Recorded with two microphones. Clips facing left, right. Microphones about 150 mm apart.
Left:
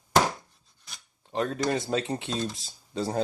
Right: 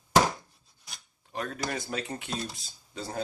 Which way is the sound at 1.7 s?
30° left (ahead or behind).